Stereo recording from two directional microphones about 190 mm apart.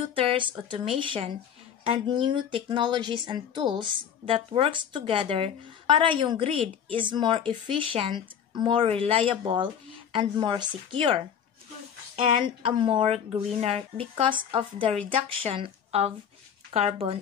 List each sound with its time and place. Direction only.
0.1 s a woman's voice: 30° right (ahead or behind)
12.4 s a woman's voice: 25° right (ahead or behind)